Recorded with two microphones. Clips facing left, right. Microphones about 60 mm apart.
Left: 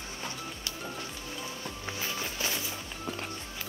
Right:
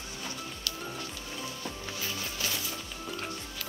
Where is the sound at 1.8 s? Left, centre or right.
Left.